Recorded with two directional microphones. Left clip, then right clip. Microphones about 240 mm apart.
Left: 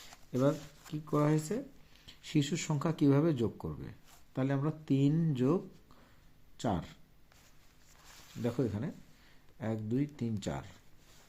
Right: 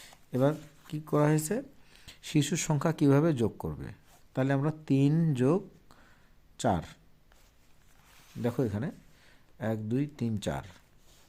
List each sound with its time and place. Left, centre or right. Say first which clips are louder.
0.3 s speech: right 3 dB; right
8.4 s speech: right 3 dB; right